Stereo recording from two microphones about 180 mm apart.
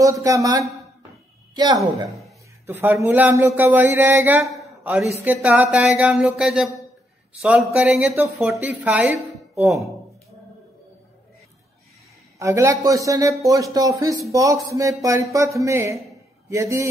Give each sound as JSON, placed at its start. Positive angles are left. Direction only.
{"t": 0.0, "sound": "a woman's voice", "side_deg": -20}
{"t": 12.4, "sound": "a woman's voice", "side_deg": -15}